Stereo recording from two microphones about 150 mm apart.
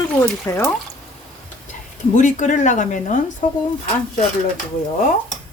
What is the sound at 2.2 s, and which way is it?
Speech, 55° left (ahead or behind).